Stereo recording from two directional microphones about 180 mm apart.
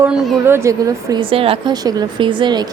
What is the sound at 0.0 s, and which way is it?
A woman's voice, 15° right (ahead or behind).